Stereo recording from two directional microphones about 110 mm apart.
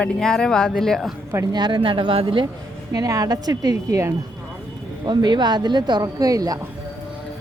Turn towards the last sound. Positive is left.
turn(degrees=-35)  # may be behind; listen again after turning